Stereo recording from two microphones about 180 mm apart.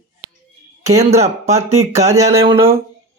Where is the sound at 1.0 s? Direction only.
35° right (ahead or behind).